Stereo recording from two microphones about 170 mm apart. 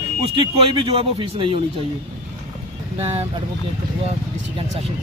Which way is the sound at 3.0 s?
40° right (ahead or behind).